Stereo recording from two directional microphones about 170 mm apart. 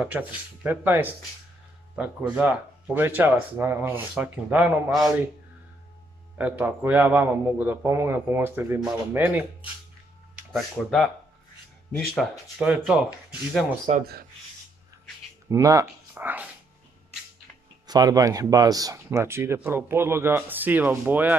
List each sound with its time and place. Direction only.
0.7 s speech: 10° right (ahead or behind)
2.3 s speech: 10° right (ahead or behind)
6.3 s speech: 10° right (ahead or behind)
10.5 s speech: centre (ahead or behind)
12.2 s speech: 5° right (ahead or behind)
15.5 s speech: 15° right (ahead or behind)
17.8 s speech: 20° right (ahead or behind)